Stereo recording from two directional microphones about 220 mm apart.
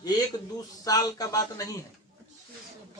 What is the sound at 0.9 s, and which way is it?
Speech, 15° left (ahead or behind).